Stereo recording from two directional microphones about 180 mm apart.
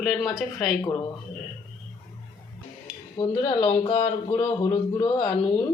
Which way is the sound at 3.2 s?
25° left (ahead or behind).